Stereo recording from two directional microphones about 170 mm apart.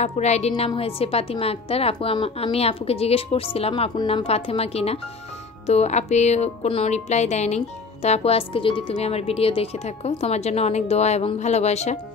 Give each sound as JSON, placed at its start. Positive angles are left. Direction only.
{"t": 0.0, "sound": "a woman's voice", "side_deg": 40}